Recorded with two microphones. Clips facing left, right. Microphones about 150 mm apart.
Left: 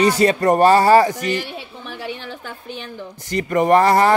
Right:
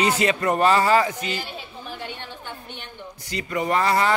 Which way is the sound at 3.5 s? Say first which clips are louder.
Left 8 dB; 50° left (ahead or behind).